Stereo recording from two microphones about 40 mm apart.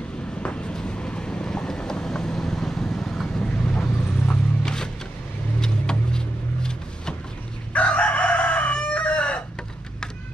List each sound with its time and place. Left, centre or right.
0.4 s vehicle: left; by 3.3 s centre
3.3 s vehicle: left
7.7 s chicken: left